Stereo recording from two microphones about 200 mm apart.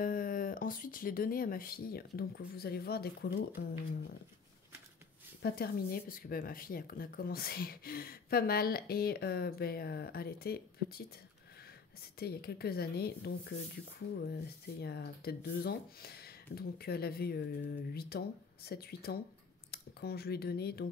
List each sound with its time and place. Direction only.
0.0 s a woman's voice: 45° left (ahead or behind)
5.4 s a woman's voice: 50° left (ahead or behind)
12.2 s a woman's voice: 50° left (ahead or behind)